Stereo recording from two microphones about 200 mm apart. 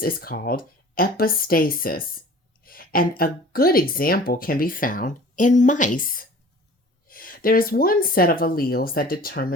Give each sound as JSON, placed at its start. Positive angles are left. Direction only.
{"t": 0.0, "sound": "speech", "side_deg": 45}